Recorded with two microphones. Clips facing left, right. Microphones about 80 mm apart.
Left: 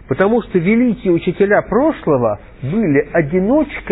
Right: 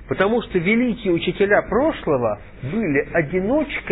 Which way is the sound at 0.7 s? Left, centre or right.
Centre.